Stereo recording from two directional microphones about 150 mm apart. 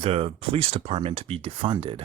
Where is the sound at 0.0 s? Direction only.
40° right (ahead or behind).